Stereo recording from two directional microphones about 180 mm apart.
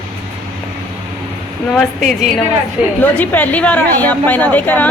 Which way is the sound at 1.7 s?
5° left (ahead or behind).